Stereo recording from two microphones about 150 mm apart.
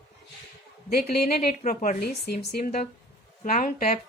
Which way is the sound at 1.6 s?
60° left (ahead or behind).